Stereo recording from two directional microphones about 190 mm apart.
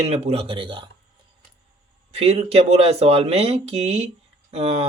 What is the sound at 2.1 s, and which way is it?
Speech, 30° right (ahead or behind).